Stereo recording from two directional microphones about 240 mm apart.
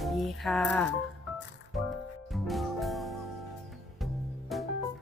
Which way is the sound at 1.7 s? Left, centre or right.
Centre.